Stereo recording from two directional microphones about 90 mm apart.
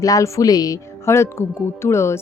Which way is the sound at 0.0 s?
40° left (ahead or behind).